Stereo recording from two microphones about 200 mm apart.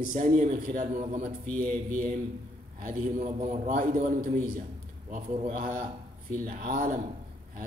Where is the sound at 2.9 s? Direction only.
40° right (ahead or behind).